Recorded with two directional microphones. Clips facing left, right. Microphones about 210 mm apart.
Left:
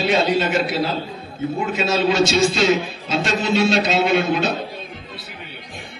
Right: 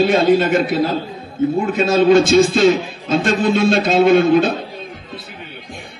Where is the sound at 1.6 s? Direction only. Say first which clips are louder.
Right 4 dB; 50° right (ahead or behind).